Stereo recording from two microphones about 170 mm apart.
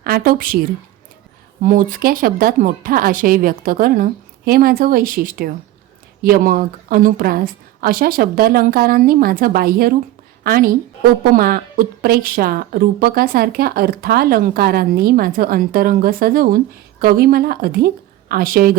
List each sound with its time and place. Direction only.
0.0 s a woman's voice: 60° right (ahead or behind)
1.6 s a woman's voice: 55° right (ahead or behind)